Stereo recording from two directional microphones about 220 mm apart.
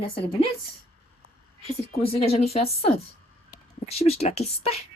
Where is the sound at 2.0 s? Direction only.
25° left (ahead or behind).